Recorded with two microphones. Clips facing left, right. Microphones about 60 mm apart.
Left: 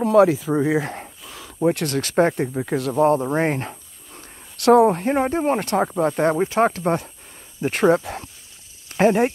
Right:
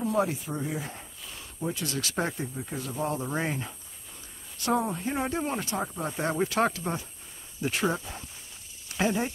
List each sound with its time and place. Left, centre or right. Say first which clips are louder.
0.0 s speech: left 12 dB; left
3.2 s speech: left 10 dB; left
4.6 s speech: left 14 dB; left
5.2 s speech: left 8 dB; left
5.6 s speech: left 11 dB; left
6.3 s speech: left 7 dB; left
6.7 s speech: left 11 dB; left
7.8 s speech: left 15 dB; left
8.8 s a sound: left 11 dB; left